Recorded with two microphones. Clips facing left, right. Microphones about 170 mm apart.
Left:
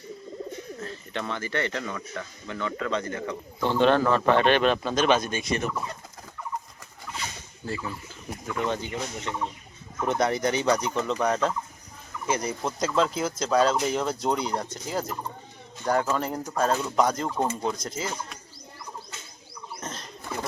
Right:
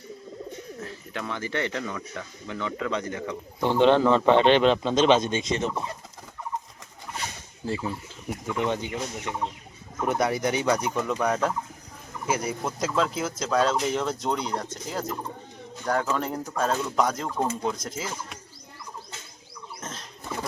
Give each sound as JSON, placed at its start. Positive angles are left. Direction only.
{"t": 0.8, "sound": "bird", "side_deg": -10}
{"t": 1.4, "sound": "a man's voice", "side_deg": -15}
{"t": 7.7, "sound": "a man's voice", "side_deg": -25}
{"t": 19.8, "sound": "pigeon", "side_deg": 0}